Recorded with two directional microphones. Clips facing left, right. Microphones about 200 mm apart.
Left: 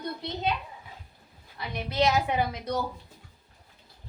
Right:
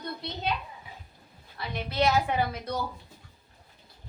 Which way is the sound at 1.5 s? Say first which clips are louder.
Left 1 dB; 15° left (ahead or behind).